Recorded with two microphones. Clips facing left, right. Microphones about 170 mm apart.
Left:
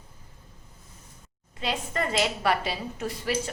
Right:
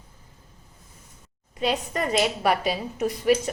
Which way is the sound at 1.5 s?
20° right (ahead or behind).